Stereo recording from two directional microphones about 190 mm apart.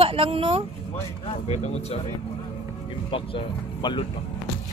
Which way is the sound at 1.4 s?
35° left (ahead or behind).